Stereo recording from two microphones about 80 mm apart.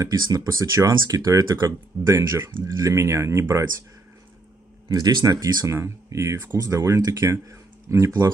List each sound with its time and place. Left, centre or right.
0.0 s speech: right
4.8 s speech: right
5.7 s speech: right